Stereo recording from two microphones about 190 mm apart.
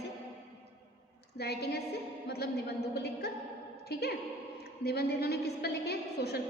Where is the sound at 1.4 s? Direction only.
60° left (ahead or behind).